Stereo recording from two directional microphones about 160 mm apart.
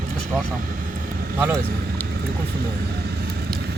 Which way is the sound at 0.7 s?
60° right (ahead or behind).